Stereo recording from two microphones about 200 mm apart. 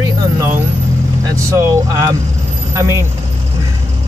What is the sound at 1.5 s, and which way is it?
Speech, 15° right (ahead or behind).